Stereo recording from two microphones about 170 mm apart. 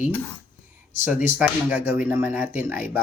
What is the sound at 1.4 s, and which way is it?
Speech, 5° right (ahead or behind).